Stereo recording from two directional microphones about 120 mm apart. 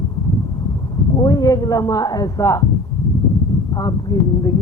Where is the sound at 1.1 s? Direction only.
30° left (ahead or behind).